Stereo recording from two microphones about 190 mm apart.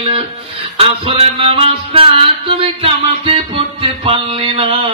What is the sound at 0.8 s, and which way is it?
Music, 30° right (ahead or behind).